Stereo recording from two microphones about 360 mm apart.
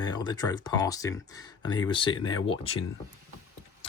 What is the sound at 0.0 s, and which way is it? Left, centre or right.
Speech, centre.